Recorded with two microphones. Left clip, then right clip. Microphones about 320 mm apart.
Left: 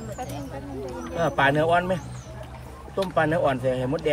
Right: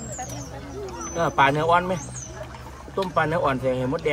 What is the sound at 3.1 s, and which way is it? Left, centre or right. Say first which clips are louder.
Speech: even; centre.